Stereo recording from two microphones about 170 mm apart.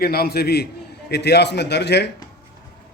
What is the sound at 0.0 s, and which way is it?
A man's voice, 65° left (ahead or behind).